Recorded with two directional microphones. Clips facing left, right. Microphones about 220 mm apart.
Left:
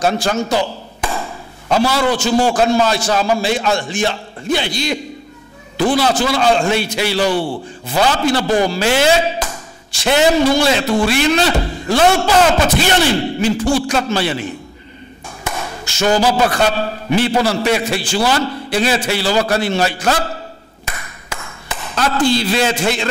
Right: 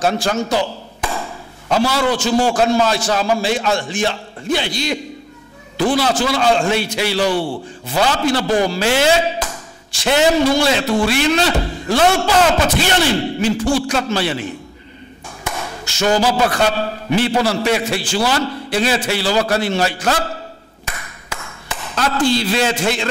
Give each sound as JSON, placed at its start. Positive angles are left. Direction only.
{"t": 0.0, "sound": "a sound", "side_deg": 10}
{"t": 1.9, "sound": "a man's voice", "side_deg": 10}
{"t": 7.2, "sound": "a man's voice", "side_deg": 40}
{"t": 7.8, "sound": "a man's voice", "side_deg": 10}
{"t": 15.4, "sound": "a sound", "side_deg": 10}
{"t": 16.3, "sound": "a man's voice", "side_deg": 10}
{"t": 20.8, "sound": "ping", "side_deg": 10}
{"t": 21.6, "sound": "chop", "side_deg": 10}